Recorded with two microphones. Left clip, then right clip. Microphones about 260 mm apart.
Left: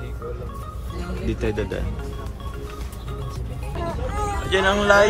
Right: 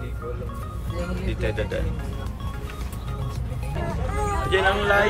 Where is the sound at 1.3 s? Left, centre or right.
Centre.